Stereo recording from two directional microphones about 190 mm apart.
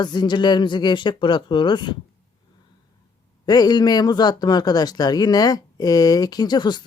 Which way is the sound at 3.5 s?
20° left (ahead or behind).